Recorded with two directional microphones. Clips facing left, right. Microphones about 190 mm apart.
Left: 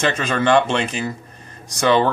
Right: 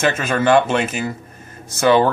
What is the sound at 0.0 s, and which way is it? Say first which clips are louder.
A man's voice: right 2 dB; 5° right (ahead or behind).